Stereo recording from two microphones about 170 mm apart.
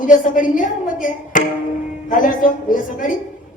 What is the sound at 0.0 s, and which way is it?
A woman's voice, 50° left (ahead or behind).